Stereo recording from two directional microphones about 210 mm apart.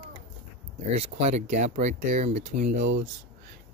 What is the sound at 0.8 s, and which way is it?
Speech, 30° right (ahead or behind).